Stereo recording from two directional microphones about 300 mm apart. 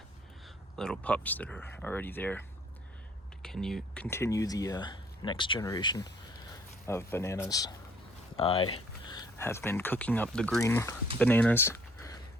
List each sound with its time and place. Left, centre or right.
0.4 s speech: centre
3.4 s speech: centre